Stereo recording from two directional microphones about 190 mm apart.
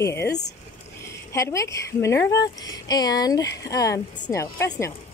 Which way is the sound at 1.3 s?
15° left (ahead or behind).